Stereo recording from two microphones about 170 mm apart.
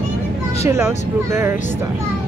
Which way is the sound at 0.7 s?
15° right (ahead or behind).